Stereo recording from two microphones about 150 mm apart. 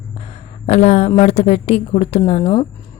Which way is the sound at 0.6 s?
45° left (ahead or behind).